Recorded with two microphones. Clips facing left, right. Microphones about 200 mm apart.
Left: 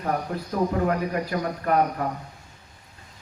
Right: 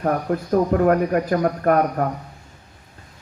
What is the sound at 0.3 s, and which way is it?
A man's voice, 60° right (ahead or behind).